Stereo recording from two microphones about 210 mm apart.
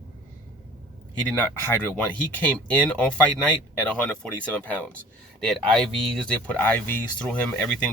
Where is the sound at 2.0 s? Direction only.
5° left (ahead or behind).